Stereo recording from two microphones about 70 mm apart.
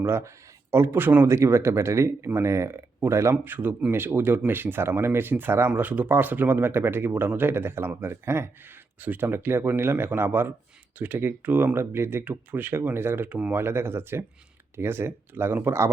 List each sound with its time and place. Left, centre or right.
0.0 s speech: right
1.3 s speech: right
3.4 s speech: right
9.0 s speech: right
9.2 s speech: right
13.6 s speech: right